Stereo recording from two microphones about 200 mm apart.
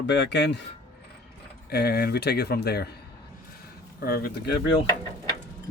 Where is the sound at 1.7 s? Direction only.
50° left (ahead or behind).